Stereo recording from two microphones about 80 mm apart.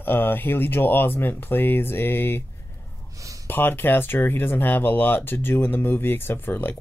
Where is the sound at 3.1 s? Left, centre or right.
Right.